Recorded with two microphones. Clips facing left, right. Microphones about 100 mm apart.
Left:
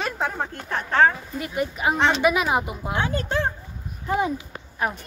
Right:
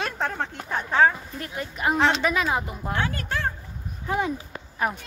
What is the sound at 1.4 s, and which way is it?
Speech, 5° left (ahead or behind).